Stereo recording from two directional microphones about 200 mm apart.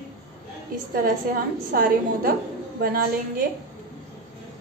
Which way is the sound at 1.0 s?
45° right (ahead or behind).